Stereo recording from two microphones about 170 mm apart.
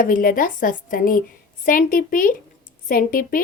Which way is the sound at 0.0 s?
55° left (ahead or behind).